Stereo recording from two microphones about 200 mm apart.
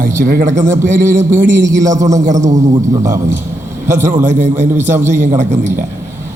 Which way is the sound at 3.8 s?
40° right (ahead or behind).